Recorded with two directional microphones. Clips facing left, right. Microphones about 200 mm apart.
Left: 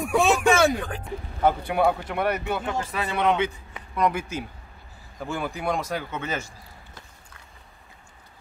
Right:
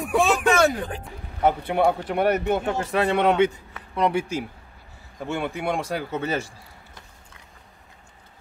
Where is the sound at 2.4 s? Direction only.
50° right (ahead or behind).